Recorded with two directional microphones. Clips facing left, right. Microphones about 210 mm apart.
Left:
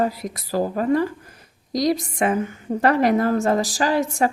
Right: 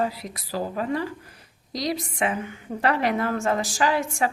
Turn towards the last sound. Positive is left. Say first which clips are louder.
# left 3 dB
turn(degrees=40)  # may be behind; listen again after turning